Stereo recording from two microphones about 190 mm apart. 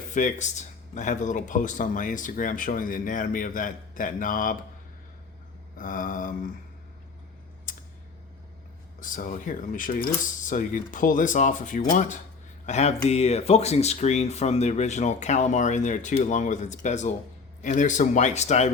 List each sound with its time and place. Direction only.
0.1 s speech: 40° left (ahead or behind)
5.7 s speech: 45° left (ahead or behind)
7.7 s a sound: 45° left (ahead or behind)
9.0 s speech: 45° left (ahead or behind)